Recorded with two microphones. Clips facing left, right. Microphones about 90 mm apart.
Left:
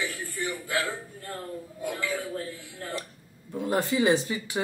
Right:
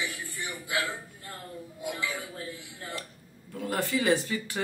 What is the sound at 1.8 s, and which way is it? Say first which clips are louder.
Speech: left 2 dB; 45° left (ahead or behind).